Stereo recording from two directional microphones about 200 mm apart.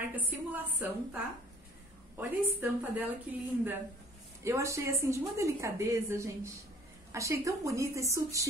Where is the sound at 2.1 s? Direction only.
10° right (ahead or behind).